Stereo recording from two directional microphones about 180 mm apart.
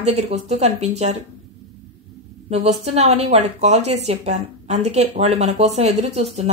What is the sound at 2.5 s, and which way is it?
A woman's voice, 35° right (ahead or behind).